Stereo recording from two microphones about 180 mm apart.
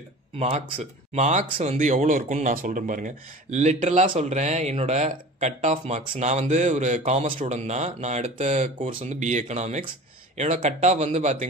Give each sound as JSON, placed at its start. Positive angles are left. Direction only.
{"t": 0.4, "sound": "speech", "side_deg": -35}